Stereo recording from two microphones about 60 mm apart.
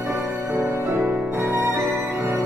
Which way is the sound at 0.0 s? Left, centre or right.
Right.